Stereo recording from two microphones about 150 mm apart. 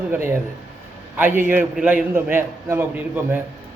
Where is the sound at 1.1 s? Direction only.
15° right (ahead or behind).